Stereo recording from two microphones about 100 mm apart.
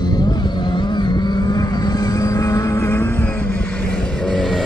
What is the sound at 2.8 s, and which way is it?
Vehicle, 20° left (ahead or behind).